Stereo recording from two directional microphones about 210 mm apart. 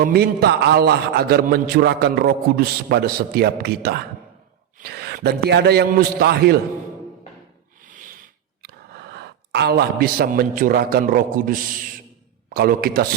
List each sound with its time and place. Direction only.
0.0 s a man's voice: 45° right (ahead or behind)
7.9 s a sound: 40° right (ahead or behind)
8.6 s a man's voice: 50° right (ahead or behind)